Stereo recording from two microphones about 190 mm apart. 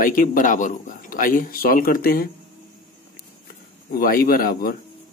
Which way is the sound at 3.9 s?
50° left (ahead or behind).